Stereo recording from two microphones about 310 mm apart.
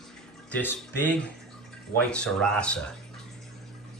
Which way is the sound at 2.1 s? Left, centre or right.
Centre.